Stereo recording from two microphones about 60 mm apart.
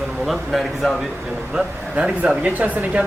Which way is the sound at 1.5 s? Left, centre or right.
Centre.